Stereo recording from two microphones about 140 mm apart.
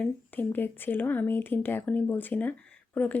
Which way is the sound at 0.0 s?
15° left (ahead or behind).